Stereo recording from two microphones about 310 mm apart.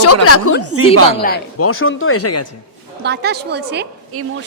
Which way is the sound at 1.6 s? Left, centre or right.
Left.